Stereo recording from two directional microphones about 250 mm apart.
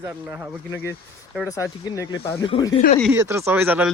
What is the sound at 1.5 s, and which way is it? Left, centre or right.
Speech, centre.